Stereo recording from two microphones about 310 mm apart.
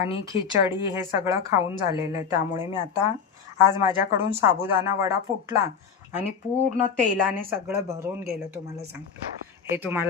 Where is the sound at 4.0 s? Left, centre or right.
Centre.